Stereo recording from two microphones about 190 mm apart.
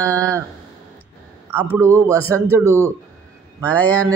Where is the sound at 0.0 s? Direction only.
15° right (ahead or behind).